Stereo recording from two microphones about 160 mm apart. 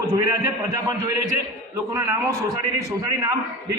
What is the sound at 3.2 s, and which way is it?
Speech, 20° right (ahead or behind).